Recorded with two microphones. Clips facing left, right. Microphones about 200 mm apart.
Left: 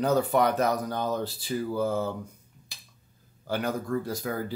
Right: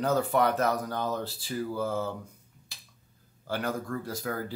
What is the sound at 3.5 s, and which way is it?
Speech, 15° left (ahead or behind).